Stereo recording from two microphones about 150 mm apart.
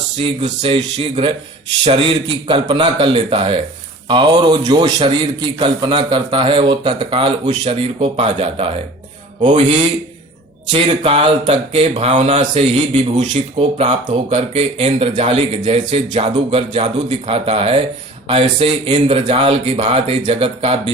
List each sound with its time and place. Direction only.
0.2 s speech: 40° right (ahead or behind)
10.7 s speech: 40° right (ahead or behind)